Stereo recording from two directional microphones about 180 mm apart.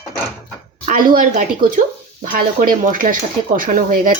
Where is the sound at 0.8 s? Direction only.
50° right (ahead or behind).